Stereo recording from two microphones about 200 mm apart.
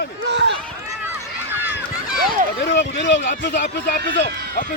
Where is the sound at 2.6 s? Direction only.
65° left (ahead or behind).